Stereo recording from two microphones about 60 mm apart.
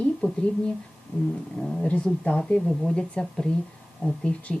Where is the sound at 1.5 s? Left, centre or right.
Centre.